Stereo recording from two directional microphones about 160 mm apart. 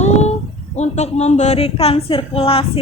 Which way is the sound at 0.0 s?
45° left (ahead or behind).